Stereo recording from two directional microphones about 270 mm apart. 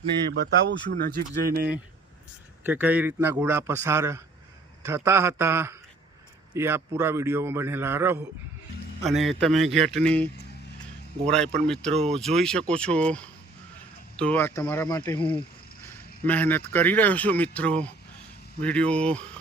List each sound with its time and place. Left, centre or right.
0.3 s speech: right
2.6 s a man's voice: centre
11.6 s speech: centre
11.9 s speech: right
12.2 s speech: centre